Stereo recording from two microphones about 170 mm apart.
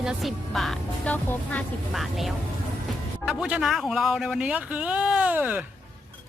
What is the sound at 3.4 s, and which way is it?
Speech, 5° right (ahead or behind).